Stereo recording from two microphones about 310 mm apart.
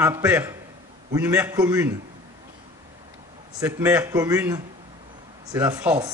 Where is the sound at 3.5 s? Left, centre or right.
Centre.